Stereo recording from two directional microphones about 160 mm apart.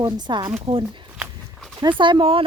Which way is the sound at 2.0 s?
30° right (ahead or behind).